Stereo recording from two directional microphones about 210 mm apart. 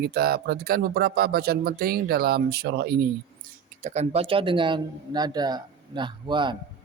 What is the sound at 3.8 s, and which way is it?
Speech, 35° right (ahead or behind).